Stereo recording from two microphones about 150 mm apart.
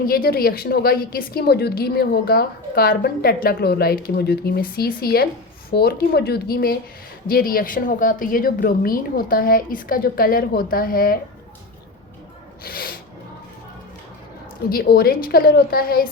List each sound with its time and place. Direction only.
0.0 s a woman's voice: 80° left
7.3 s a woman's voice: 80° left
12.6 s snort: 75° left (ahead or behind)
14.7 s a woman's voice: 85° left